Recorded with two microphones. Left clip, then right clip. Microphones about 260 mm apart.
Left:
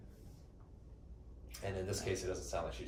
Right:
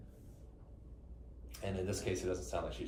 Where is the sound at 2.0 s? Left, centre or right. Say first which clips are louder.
Right 2 dB; centre.